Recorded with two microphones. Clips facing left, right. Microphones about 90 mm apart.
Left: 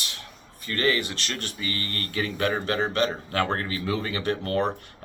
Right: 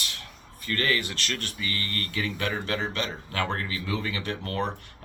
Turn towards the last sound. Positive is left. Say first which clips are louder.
# left 5 dB
turn(degrees=40)  # may be behind; listen again after turning